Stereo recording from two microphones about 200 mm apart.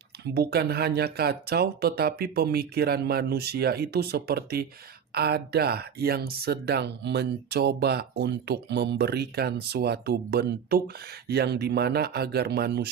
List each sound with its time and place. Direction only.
0.3 s speech: 50° right (ahead or behind)